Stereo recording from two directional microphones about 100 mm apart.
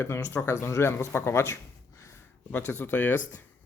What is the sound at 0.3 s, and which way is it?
Speech, 25° left (ahead or behind).